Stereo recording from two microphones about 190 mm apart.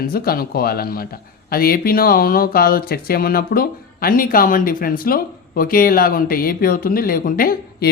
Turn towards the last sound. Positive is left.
turn(degrees=50)  # may be behind; listen again after turning